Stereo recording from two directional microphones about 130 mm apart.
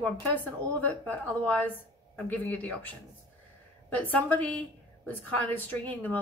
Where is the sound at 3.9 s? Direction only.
10° left (ahead or behind).